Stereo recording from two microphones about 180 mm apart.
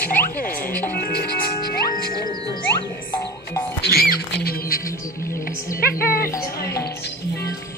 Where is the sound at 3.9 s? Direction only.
55° left (ahead or behind).